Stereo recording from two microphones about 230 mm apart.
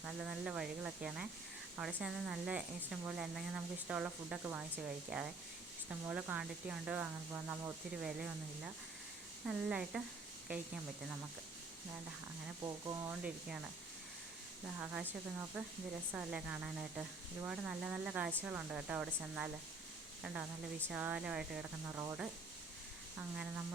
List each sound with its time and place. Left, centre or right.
0.0 s speech: centre
12.6 s speech: centre
15.6 s speech: centre